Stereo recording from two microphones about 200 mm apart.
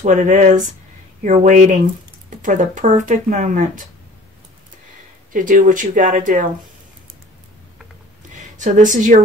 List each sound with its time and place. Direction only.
0.0 s speech: 40° right (ahead or behind)
5.3 s speech: 40° right (ahead or behind)
8.3 s speech: 40° right (ahead or behind)